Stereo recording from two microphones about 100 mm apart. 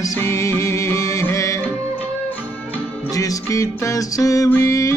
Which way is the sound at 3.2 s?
35° left (ahead or behind).